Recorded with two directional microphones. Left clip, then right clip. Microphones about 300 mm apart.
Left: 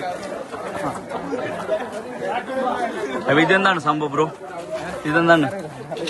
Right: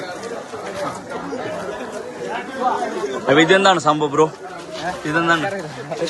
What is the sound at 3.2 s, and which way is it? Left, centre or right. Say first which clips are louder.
A man's voice: right 3 dB; centre.